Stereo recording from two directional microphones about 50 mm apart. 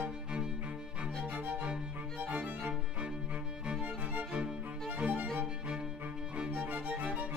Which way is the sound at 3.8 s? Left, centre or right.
Right.